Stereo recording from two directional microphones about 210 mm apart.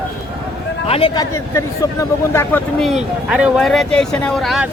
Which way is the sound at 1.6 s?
15° left (ahead or behind).